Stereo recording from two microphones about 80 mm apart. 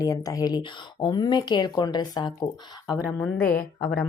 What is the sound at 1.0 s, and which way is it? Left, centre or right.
Speech, left.